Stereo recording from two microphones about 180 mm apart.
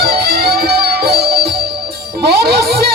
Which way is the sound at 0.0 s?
65° right (ahead or behind).